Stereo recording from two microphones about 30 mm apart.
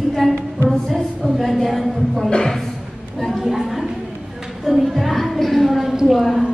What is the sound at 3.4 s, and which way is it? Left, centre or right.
A woman's voice, centre.